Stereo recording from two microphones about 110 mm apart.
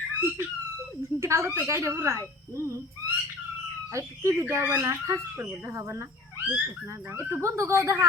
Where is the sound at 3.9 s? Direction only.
30° right (ahead or behind).